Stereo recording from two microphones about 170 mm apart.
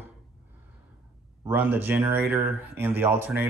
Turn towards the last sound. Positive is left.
turn(degrees=-10)  # may be behind; listen again after turning